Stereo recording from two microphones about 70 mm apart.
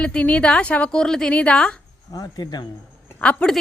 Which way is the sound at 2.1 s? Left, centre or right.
Left.